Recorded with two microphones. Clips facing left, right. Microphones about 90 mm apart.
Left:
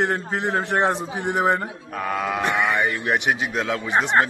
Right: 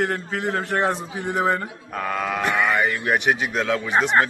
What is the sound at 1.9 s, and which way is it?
A man's voice, 5° left (ahead or behind).